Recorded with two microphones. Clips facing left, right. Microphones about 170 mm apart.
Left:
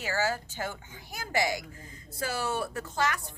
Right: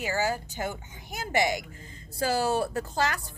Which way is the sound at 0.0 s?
15° right (ahead or behind).